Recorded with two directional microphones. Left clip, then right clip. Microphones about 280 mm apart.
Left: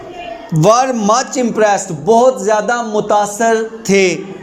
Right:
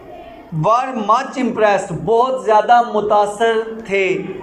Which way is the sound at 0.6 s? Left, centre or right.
Left.